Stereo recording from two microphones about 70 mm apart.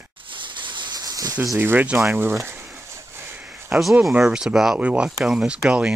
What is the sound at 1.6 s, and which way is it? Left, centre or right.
Speech, right.